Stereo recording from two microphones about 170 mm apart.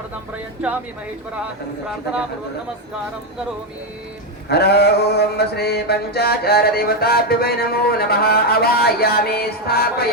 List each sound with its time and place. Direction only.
0.6 s speech: 5° right (ahead or behind)
4.4 s mantra: 75° left (ahead or behind)